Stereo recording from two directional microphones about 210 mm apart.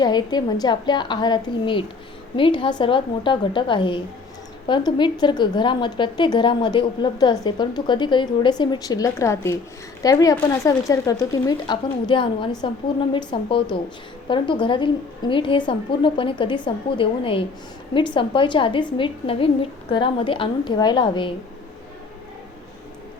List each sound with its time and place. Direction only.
0.0 s a woman's voice: 20° left (ahead or behind)